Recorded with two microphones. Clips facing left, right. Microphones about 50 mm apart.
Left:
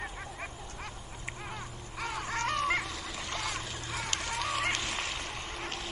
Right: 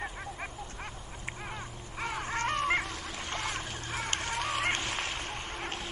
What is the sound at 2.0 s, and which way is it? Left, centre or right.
Dog, right.